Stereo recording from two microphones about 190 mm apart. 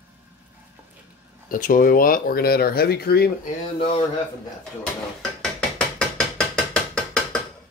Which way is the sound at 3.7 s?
30° left (ahead or behind).